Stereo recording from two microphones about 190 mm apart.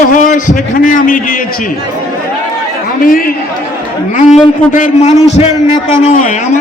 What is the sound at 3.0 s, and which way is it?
Speech, 50° left (ahead or behind).